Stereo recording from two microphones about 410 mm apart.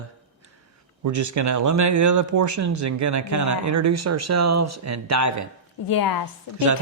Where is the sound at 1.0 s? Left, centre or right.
Right.